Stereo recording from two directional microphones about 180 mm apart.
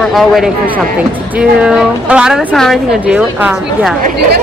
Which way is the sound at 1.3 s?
5° right (ahead or behind).